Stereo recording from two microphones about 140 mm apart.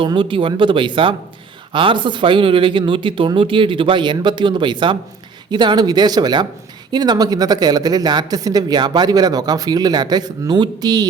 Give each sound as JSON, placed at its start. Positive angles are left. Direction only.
{"t": 0.0, "sound": "speech", "side_deg": -35}